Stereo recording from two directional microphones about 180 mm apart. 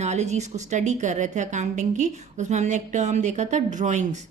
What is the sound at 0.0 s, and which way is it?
A woman's voice, 40° right (ahead or behind).